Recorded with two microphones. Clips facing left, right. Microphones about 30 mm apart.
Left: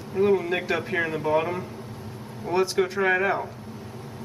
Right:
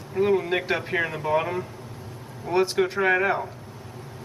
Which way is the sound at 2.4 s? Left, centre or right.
Centre.